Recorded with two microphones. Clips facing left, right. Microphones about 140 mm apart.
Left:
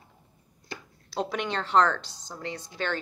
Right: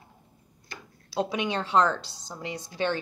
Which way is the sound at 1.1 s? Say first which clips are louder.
Right 2 dB; 10° right (ahead or behind).